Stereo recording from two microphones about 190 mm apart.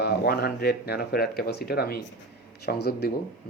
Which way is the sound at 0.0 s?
55° left (ahead or behind).